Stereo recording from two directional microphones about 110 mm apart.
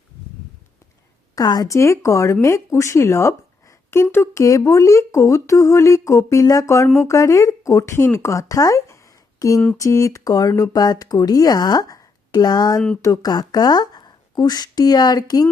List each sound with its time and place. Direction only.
1.4 s speech: 35° left (ahead or behind)
9.4 s a sound: 35° left (ahead or behind)
9.7 s speech: 30° left (ahead or behind)